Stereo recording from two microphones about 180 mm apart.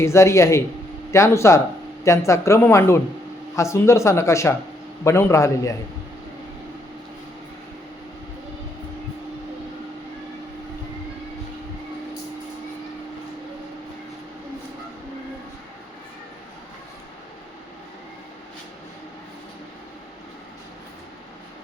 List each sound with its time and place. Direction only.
0.0 s speech: 15° left (ahead or behind)